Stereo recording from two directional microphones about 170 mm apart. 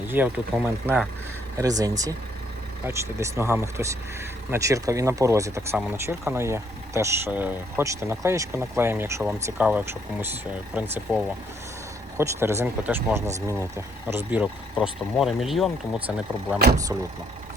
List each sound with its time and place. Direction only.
0.1 s speech: 10° right (ahead or behind)
1.5 s speech: 20° right (ahead or behind)
16.9 s speech: 20° right (ahead or behind)